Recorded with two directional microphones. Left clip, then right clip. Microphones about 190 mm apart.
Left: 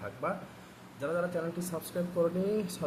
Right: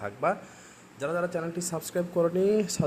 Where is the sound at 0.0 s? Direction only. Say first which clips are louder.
Right 7 dB; 55° right (ahead or behind).